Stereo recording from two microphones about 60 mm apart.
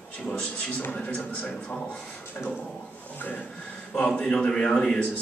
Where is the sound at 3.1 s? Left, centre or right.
Left.